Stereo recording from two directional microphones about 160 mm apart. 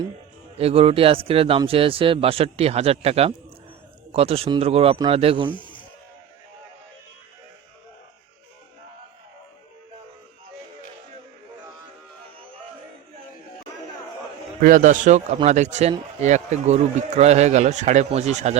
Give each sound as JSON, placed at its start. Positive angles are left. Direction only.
{"t": 0.5, "sound": "speech", "side_deg": -40}
{"t": 5.5, "sound": "music", "side_deg": 30}
{"t": 14.6, "sound": "speech", "side_deg": -55}